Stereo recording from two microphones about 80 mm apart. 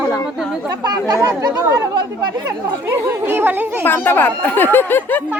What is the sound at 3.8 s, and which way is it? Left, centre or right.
Speech, left.